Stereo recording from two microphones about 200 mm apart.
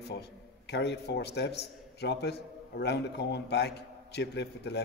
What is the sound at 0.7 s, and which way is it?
A man's voice, 60° left (ahead or behind).